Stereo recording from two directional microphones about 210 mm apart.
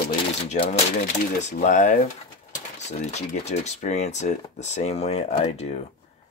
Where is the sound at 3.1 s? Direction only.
30° left (ahead or behind).